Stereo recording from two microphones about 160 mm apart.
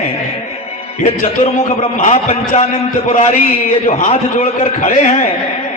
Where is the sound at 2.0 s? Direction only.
40° left (ahead or behind).